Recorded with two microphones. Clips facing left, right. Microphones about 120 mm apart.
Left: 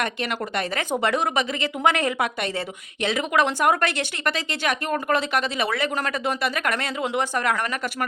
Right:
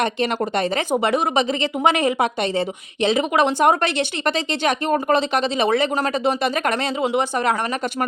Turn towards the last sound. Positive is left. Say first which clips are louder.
# right 4 dB
turn(degrees=-20)  # may be behind; listen again after turning